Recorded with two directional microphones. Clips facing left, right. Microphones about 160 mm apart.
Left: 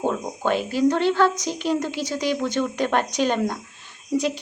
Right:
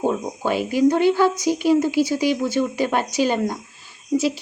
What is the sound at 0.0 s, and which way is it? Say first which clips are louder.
A woman's voice: right 2 dB; 10° right (ahead or behind).